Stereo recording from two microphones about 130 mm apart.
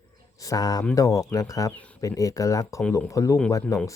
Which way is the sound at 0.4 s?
25° left (ahead or behind).